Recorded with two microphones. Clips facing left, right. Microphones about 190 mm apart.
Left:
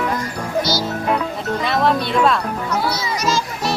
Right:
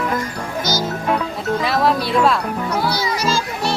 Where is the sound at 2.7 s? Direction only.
30° right (ahead or behind).